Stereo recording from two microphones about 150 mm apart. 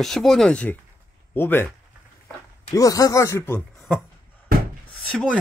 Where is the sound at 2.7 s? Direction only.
25° left (ahead or behind).